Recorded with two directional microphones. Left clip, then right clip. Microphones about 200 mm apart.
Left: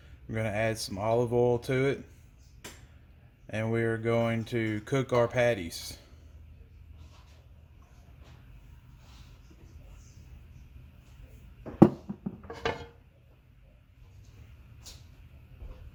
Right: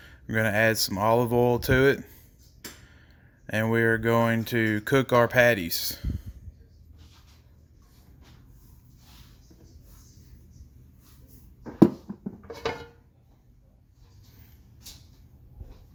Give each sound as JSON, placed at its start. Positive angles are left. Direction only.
{"t": 0.3, "sound": "speech", "side_deg": -45}
{"t": 3.4, "sound": "speech", "side_deg": -45}